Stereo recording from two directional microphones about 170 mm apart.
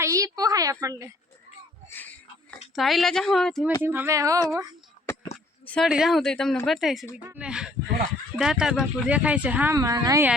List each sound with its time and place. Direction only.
0.0 s a woman's voice: 20° right (ahead or behind)
2.0 s a sound: 10° left (ahead or behind)
2.7 s a woman's voice: centre (ahead or behind)
3.8 s speech: 15° right (ahead or behind)
5.6 s a woman's voice: 5° left (ahead or behind); by 10.2 s 20° right (ahead or behind)